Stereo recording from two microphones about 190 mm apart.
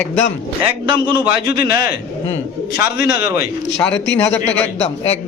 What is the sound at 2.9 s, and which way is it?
Speech, 55° left (ahead or behind).